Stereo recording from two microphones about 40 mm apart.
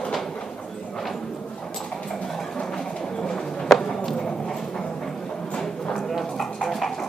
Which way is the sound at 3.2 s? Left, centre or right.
Centre.